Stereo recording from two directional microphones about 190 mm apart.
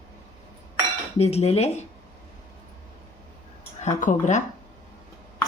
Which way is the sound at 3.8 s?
40° left (ahead or behind).